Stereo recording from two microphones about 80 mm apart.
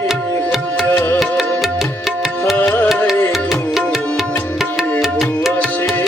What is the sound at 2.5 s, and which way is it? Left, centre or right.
Music, left.